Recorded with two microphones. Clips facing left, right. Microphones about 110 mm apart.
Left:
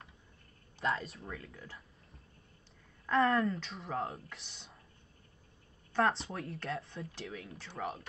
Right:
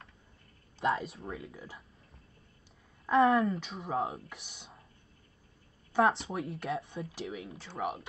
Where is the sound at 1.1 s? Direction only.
25° right (ahead or behind).